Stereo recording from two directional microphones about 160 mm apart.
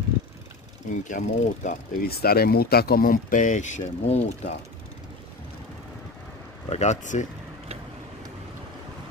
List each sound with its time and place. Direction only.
1.0 s speech: 55° left (ahead or behind)
6.7 s speech: 45° left (ahead or behind)